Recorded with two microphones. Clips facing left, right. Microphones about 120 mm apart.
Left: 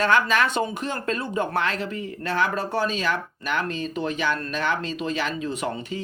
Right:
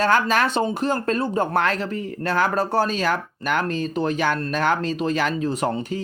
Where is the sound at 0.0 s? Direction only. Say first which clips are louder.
Right 2 dB; 40° right (ahead or behind).